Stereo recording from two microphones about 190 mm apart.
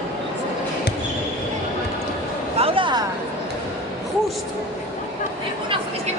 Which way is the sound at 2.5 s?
30° right (ahead or behind).